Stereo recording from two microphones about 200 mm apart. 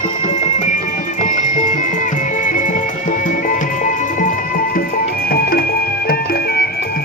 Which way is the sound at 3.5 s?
40° left (ahead or behind).